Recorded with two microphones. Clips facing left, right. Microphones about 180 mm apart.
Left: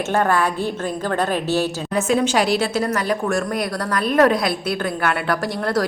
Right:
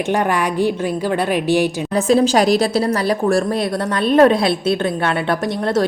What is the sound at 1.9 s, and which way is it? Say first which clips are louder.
Speech: right 4 dB; 35° right (ahead or behind).